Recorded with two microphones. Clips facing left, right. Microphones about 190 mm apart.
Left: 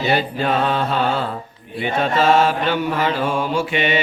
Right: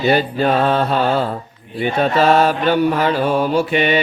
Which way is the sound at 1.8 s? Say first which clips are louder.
Right 3 dB; 40° right (ahead or behind).